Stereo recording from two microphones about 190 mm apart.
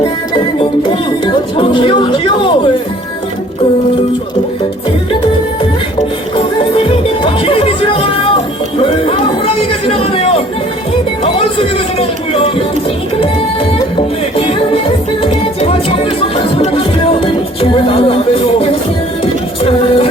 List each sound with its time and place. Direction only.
0.8 s music: 25° left (ahead or behind)
9.8 s a sound: 30° left (ahead or behind)
16.6 s music: 30° left (ahead or behind)
19.2 s music: 30° left (ahead or behind)